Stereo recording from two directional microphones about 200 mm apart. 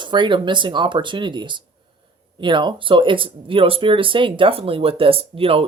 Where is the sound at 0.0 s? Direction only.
25° right (ahead or behind).